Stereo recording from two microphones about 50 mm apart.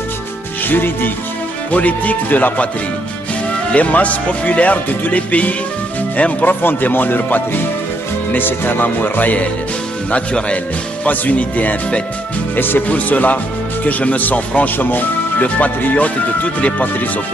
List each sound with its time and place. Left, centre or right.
0.7 s music: left
1.7 s speech: left
3.7 s speech: left
6.6 s speech: left
12.5 s music: left
12.8 s speech: left